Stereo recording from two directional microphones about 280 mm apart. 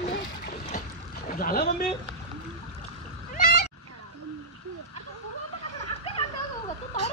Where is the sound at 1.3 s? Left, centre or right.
Left.